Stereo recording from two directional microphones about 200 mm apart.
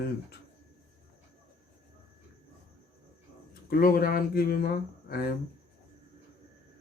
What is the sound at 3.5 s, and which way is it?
Speech, 50° left (ahead or behind).